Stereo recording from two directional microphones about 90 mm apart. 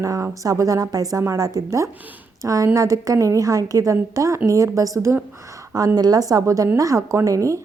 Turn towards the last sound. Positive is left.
turn(degrees=-35)  # may be behind; listen again after turning